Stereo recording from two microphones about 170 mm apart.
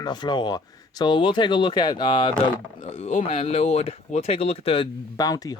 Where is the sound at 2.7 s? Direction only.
40° left (ahead or behind); by 5.6 s 20° left (ahead or behind).